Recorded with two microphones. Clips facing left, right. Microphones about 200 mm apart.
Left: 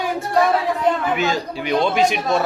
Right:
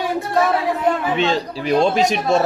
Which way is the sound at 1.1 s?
30° right (ahead or behind).